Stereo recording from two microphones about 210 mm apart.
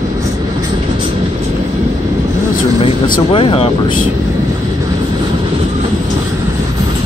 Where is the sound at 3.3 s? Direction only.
25° left (ahead or behind).